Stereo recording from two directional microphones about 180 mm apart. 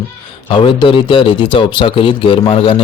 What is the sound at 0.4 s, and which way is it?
A man's voice, 25° left (ahead or behind).